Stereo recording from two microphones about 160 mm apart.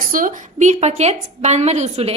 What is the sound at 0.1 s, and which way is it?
A woman's voice, 55° right (ahead or behind).